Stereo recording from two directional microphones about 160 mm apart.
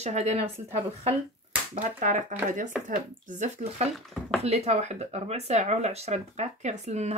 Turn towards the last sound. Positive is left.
turn(degrees=-45)  # may be behind; listen again after turning